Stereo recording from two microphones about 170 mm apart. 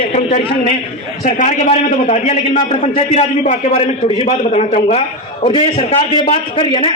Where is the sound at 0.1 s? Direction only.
40° left (ahead or behind).